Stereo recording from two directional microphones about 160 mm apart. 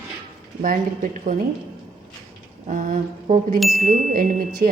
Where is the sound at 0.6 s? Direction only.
55° right (ahead or behind).